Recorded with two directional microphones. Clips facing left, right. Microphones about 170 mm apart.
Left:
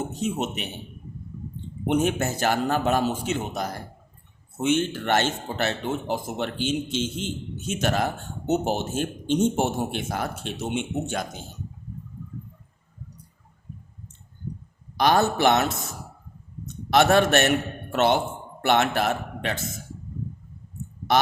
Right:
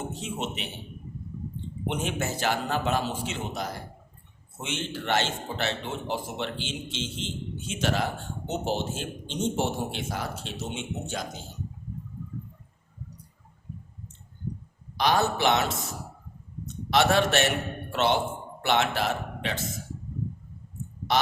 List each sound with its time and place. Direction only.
0.1 s a man's voice: 45° left (ahead or behind)
1.9 s speech: 45° left (ahead or behind)
14.9 s speech: 50° left (ahead or behind)
16.9 s speech: 50° left (ahead or behind)